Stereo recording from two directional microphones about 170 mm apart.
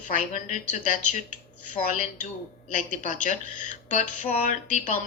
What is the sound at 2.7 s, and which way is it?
A woman's voice, 50° left (ahead or behind).